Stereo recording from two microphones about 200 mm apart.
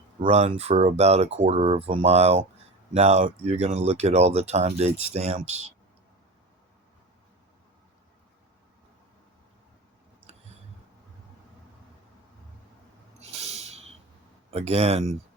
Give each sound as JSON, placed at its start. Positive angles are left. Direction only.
{"t": 0.2, "sound": "speech", "side_deg": -35}
{"t": 13.1, "sound": "a sound", "side_deg": -30}
{"t": 14.5, "sound": "speech", "side_deg": -30}